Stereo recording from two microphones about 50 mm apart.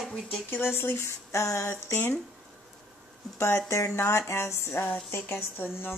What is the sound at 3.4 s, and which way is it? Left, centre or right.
Speech, left.